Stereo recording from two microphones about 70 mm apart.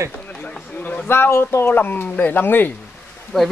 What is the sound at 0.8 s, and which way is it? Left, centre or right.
Speech, left.